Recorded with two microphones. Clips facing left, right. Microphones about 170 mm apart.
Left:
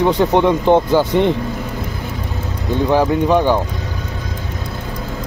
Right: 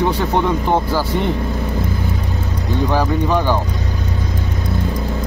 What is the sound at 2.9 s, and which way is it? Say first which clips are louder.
Speech: left 5 dB; 15° left (ahead or behind).